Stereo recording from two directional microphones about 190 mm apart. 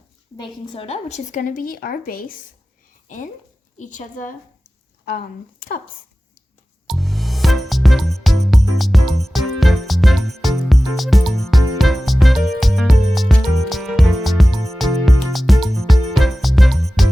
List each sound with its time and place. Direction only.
0.7 s speech: 30° left (ahead or behind); by 2.3 s 50° left (ahead or behind)
3.8 s speech: 40° left (ahead or behind)
6.8 s music: centre (ahead or behind)